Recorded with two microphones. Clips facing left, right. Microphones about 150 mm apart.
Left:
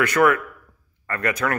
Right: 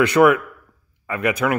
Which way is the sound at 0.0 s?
20° right (ahead or behind).